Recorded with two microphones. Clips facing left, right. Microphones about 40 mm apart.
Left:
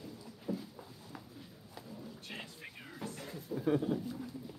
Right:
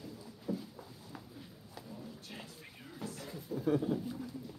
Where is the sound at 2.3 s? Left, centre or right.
Left.